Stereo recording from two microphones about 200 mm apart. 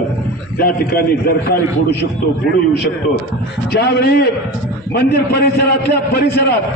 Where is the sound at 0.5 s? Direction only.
50° left (ahead or behind).